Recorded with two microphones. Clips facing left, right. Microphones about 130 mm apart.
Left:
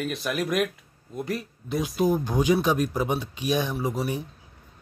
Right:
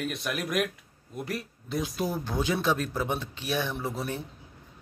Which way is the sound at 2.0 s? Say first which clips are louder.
Left 10 dB; 15° left (ahead or behind).